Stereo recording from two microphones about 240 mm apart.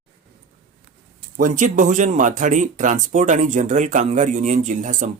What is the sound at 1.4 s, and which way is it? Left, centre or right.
Speech, right.